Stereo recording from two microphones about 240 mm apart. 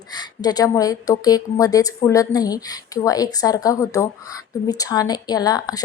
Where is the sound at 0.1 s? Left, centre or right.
Centre.